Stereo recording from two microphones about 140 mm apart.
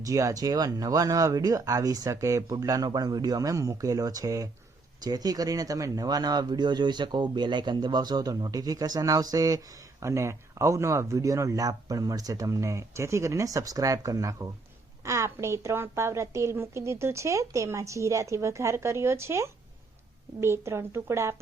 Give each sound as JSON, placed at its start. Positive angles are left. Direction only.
{"t": 0.0, "sound": "speech", "side_deg": -25}